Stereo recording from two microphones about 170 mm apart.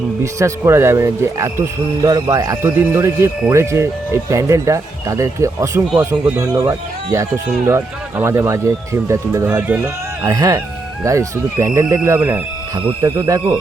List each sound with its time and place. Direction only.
0.2 s speech: 15° right (ahead or behind)